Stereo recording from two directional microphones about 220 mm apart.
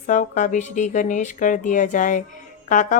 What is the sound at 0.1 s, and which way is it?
Speech, 35° left (ahead or behind).